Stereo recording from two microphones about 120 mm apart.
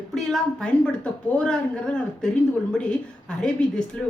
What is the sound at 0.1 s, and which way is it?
A woman's voice, 5° left (ahead or behind).